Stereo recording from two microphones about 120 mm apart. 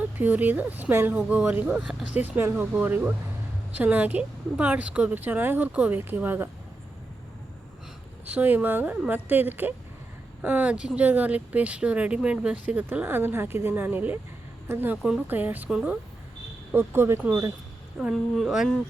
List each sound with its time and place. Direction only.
0.0 s speech: 15° right (ahead or behind)
8.3 s speech: 15° right (ahead or behind)
18.0 s speech: centre (ahead or behind)